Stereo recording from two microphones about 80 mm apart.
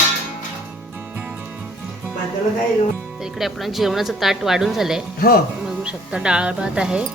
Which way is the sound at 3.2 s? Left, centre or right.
Centre.